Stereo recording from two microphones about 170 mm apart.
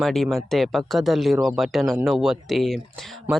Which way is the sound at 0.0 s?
Centre (ahead or behind).